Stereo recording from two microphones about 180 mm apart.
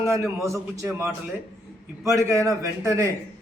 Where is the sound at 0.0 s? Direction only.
15° right (ahead or behind).